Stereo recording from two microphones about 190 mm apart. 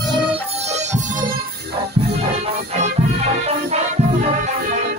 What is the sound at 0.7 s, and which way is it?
Music, 40° right (ahead or behind).